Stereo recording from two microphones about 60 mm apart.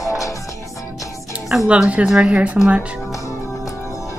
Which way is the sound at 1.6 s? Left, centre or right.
Right.